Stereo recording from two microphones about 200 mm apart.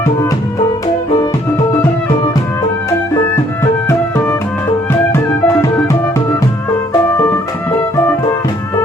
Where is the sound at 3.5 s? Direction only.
15° left (ahead or behind).